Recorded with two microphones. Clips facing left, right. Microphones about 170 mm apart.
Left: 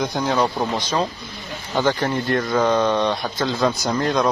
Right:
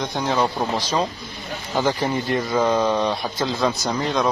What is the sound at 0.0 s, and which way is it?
Speech, centre (ahead or behind).